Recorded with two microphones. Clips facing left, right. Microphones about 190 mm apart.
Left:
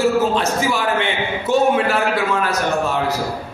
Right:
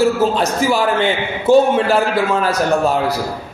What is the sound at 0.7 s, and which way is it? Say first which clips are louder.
Speech: right 4 dB; 35° right (ahead or behind).